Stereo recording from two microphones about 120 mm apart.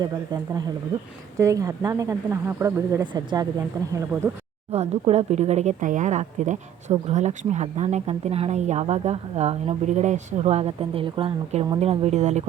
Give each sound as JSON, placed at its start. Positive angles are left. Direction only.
{"t": 0.0, "sound": "speech", "side_deg": -35}
{"t": 3.1, "sound": "speech", "side_deg": -35}
{"t": 3.8, "sound": "speech", "side_deg": -25}
{"t": 4.7, "sound": "speech", "side_deg": -60}
{"t": 10.4, "sound": "speech", "side_deg": -55}
{"t": 11.8, "sound": "speech", "side_deg": -60}